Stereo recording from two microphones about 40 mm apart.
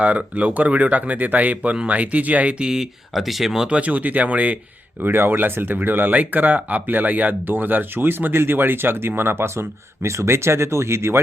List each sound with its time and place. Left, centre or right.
0.0 s speech: right
2.6 s speech: centre
3.2 s speech: centre
3.7 s speech: right
5.0 s speech: right